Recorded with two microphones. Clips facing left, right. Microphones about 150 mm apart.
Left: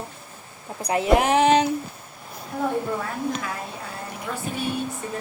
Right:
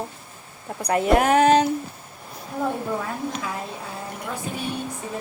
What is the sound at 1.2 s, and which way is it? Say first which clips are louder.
Speech: right 3 dB; 45° right (ahead or behind).